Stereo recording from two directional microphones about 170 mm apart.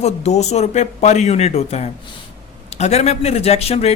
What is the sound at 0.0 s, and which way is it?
Speech, 40° left (ahead or behind).